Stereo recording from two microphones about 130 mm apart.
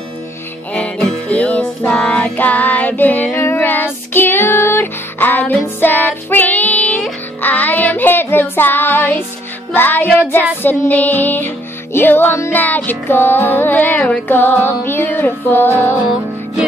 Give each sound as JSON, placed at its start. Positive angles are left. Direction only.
{"t": 0.7, "sound": "music", "side_deg": 10}